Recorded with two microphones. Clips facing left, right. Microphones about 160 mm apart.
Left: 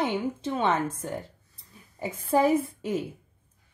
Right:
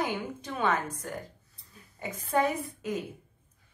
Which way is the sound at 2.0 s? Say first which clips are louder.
Left 4 dB; 30° left (ahead or behind).